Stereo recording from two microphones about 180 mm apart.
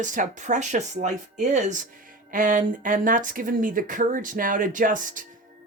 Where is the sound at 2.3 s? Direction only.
50° right (ahead or behind).